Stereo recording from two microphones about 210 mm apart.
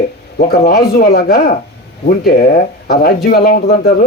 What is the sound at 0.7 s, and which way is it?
Speech, 45° left (ahead or behind).